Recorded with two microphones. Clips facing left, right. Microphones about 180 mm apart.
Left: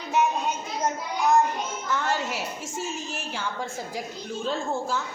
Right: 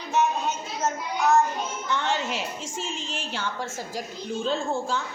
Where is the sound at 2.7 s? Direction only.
90° right.